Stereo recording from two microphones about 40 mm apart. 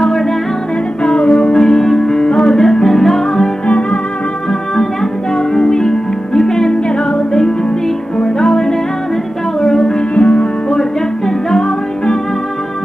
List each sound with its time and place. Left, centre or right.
1.0 s music: left; by 3.4 s centre
3.6 s music: left
5.5 s music: centre
8.2 s music: centre
10.1 s music: left
10.7 s music: centre